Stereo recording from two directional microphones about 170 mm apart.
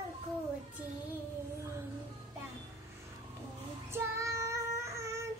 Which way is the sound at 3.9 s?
15° right (ahead or behind).